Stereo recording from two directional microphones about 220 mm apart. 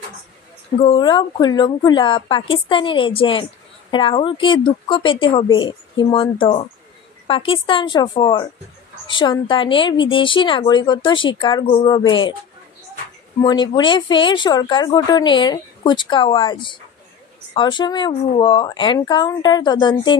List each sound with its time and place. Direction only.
0.7 s speech: 25° left (ahead or behind)
13.4 s speech: 20° left (ahead or behind)